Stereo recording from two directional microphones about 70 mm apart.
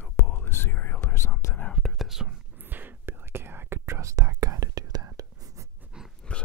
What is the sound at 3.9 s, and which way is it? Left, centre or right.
Whispering, right.